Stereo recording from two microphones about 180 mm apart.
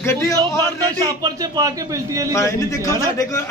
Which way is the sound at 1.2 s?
20° right (ahead or behind).